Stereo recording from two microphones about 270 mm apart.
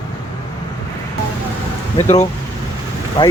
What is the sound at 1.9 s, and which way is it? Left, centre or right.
Speech, left.